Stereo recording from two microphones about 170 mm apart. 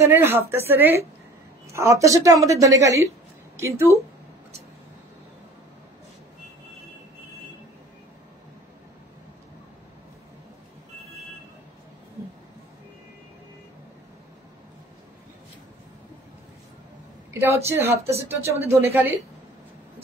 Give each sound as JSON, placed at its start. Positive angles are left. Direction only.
{"t": 0.0, "sound": "a woman's voice", "side_deg": -15}
{"t": 17.3, "sound": "a sound", "side_deg": -15}
{"t": 17.6, "sound": "speech", "side_deg": -15}